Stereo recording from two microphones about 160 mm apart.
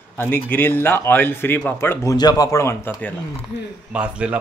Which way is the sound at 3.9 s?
10° right (ahead or behind).